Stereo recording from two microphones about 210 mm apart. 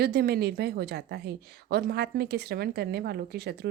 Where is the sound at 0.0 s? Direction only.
50° right (ahead or behind).